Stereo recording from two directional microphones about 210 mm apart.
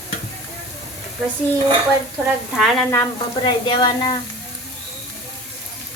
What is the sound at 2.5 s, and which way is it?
Sizzle, centre (ahead or behind).